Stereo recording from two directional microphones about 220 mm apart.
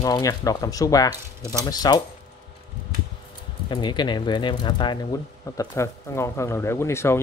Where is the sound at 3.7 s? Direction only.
20° left (ahead or behind).